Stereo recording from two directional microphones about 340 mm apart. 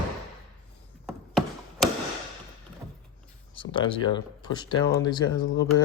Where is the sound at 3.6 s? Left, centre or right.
Left.